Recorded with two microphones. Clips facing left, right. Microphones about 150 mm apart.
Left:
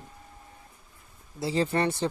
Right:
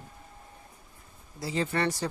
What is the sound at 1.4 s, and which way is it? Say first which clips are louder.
Speech: left 3 dB; 30° left (ahead or behind).